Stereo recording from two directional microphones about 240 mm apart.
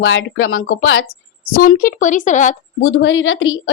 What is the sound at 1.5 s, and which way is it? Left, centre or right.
Speech, left.